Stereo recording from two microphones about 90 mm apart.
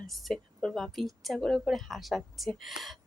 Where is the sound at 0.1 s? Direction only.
Centre (ahead or behind).